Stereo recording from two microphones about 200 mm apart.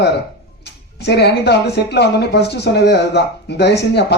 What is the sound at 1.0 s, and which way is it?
Speech, 55° left (ahead or behind).